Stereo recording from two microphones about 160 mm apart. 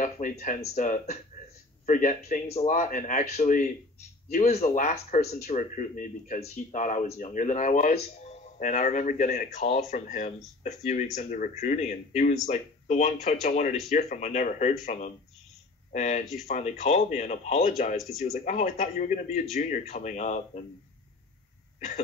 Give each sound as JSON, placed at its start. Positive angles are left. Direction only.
{"t": 0.0, "sound": "speech", "side_deg": 50}
{"t": 2.4, "sound": "speech", "side_deg": 45}
{"t": 21.7, "sound": "throat clearing", "side_deg": 55}